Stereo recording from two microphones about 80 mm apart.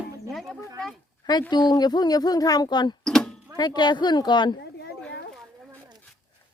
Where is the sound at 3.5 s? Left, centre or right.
Left.